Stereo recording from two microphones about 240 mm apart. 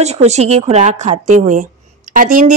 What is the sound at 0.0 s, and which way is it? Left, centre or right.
A woman's voice, right.